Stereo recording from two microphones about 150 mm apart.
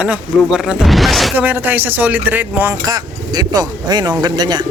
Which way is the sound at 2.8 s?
25° right (ahead or behind).